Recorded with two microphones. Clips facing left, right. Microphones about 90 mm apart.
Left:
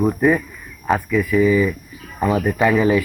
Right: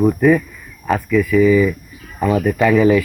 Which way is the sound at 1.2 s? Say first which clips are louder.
Right 5 dB; 15° left (ahead or behind).